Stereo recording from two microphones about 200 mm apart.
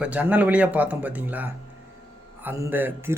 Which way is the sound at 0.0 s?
5° right (ahead or behind).